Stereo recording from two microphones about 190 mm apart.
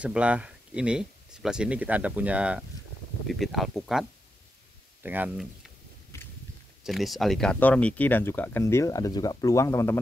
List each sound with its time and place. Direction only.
0.0 s speech: 5° right (ahead or behind)
5.0 s speech: 10° right (ahead or behind)
6.8 s speech: centre (ahead or behind); by 9.9 s 15° left (ahead or behind)